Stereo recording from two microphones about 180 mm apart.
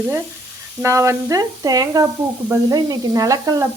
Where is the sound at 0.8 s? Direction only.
15° right (ahead or behind).